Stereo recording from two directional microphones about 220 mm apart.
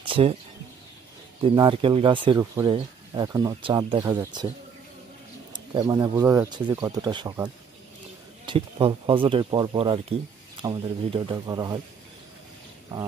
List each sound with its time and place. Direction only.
0.0 s a sound: 25° right (ahead or behind)
1.4 s speech: 20° right (ahead or behind)
5.5 s speech: 20° right (ahead or behind)